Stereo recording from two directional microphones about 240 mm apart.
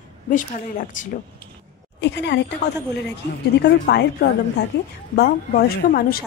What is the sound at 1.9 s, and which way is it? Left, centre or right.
Speech, left.